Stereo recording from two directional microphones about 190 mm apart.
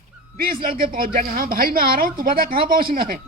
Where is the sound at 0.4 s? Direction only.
50° right (ahead or behind).